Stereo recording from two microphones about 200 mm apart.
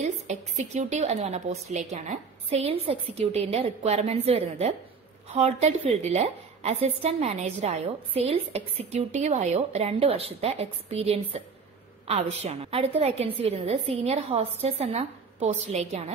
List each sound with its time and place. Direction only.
0.0 s a woman's voice: 35° right (ahead or behind)